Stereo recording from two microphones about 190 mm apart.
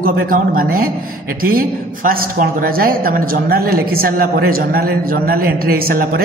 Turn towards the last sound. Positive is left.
turn(degrees=-50)  # may be behind; listen again after turning